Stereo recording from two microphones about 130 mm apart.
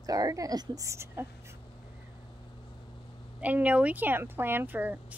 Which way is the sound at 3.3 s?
10° right (ahead or behind).